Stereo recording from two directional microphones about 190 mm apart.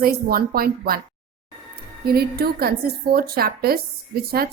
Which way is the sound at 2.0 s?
55° right (ahead or behind).